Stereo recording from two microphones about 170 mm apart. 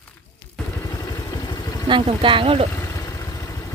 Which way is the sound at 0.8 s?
20° left (ahead or behind).